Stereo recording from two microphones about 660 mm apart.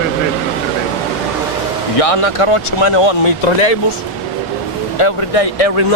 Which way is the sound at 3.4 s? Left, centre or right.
Left.